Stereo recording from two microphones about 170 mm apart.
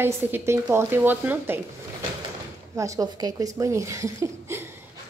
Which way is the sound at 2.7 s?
20° right (ahead or behind).